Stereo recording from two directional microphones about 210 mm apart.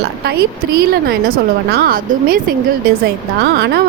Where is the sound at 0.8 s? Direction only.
50° right (ahead or behind).